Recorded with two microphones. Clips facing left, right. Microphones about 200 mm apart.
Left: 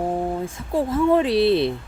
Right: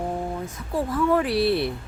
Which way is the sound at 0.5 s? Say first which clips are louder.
Left 3 dB; 25° left (ahead or behind).